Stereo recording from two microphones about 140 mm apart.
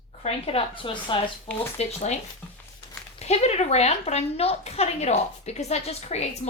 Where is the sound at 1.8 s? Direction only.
55° left (ahead or behind).